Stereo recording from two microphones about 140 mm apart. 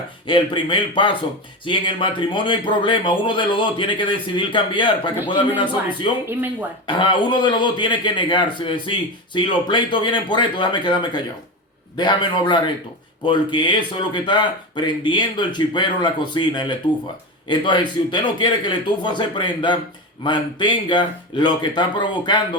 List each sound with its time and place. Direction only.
0.3 s a man's voice: 35° left (ahead or behind)
6.2 s speech: 15° right (ahead or behind)
6.8 s a man's voice: 35° left (ahead or behind)